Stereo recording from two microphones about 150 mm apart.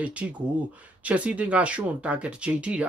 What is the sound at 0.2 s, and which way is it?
Speech, 10° right (ahead or behind).